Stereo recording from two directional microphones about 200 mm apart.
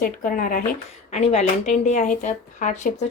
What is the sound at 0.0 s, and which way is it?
Speech, 45° left (ahead or behind).